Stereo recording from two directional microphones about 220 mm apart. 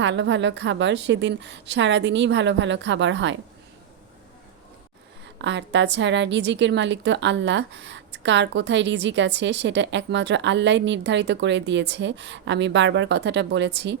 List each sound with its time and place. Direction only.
0.0 s a woman's voice: 55° right (ahead or behind)
5.4 s a woman's voice: 55° right (ahead or behind)